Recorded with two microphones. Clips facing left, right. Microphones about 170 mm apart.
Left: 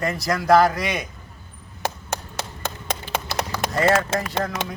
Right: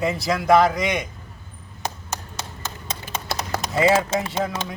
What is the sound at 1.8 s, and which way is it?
Chop, 60° left (ahead or behind).